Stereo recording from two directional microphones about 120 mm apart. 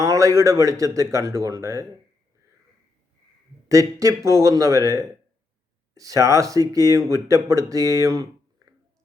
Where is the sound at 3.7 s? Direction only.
25° right (ahead or behind).